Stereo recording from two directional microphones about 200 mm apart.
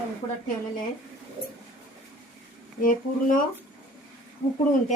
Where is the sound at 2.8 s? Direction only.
40° left (ahead or behind).